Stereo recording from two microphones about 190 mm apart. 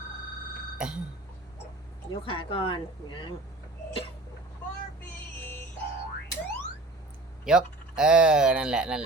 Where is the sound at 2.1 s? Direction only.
30° left (ahead or behind).